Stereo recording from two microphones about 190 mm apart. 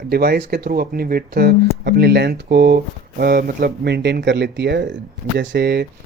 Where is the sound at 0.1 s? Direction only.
55° right (ahead or behind).